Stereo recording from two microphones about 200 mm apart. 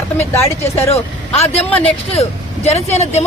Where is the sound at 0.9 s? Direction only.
30° left (ahead or behind).